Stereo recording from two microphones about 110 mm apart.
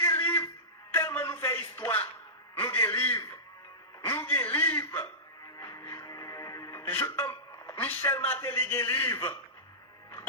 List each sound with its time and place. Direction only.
0.0 s music: 20° left (ahead or behind)
2.6 s a sound: 25° left (ahead or behind)
4.0 s chuckle: 20° left (ahead or behind)
5.5 s music: 30° left (ahead or behind)